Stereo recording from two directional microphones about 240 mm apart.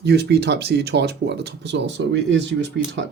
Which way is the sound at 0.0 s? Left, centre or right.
Right.